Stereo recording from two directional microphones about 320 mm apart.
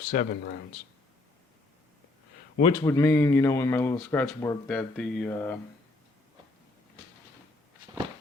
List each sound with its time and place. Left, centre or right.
0.1 s speech: left
2.6 s speech: centre